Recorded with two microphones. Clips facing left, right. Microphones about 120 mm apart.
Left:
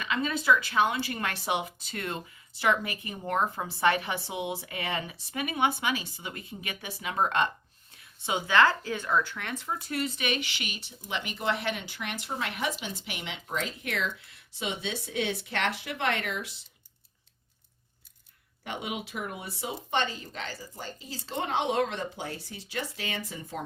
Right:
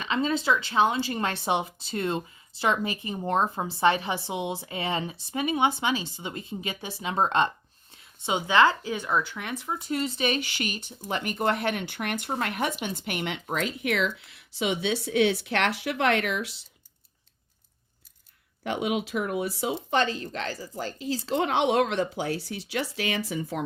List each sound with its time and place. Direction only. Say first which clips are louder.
0.0 s speech: right 4 dB; 30° right (ahead or behind); by 16.6 s 90° right
18.6 s speech: right 8 dB; 90° right